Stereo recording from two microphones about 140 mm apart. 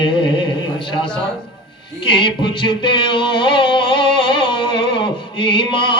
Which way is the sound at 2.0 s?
35° left (ahead or behind).